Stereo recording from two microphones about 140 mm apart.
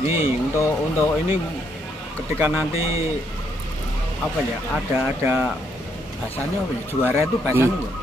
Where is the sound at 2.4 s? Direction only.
15° right (ahead or behind).